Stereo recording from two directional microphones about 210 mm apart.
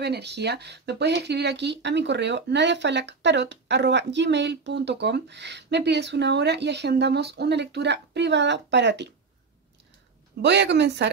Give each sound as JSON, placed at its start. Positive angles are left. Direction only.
{"t": 0.0, "sound": "speech", "side_deg": -50}
{"t": 10.4, "sound": "speech", "side_deg": -55}